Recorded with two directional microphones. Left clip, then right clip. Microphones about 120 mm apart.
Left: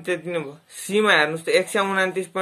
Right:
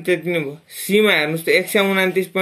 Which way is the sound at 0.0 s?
20° right (ahead or behind).